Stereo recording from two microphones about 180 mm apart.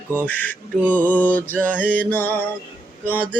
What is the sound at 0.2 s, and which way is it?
Mantra, 10° left (ahead or behind).